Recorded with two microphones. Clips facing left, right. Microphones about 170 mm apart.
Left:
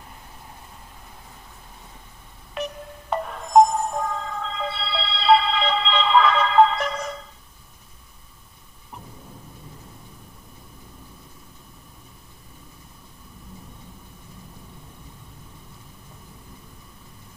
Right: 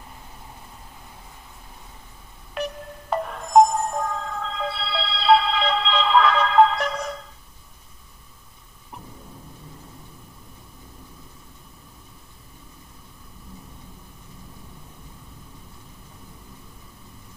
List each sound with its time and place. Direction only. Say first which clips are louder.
2.5 s music: right 1 dB; centre (ahead or behind)